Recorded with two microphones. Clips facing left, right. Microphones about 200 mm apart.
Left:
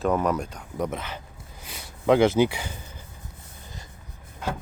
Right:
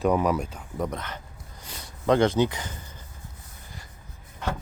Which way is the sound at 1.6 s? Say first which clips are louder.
Left 2 dB; 10° left (ahead or behind).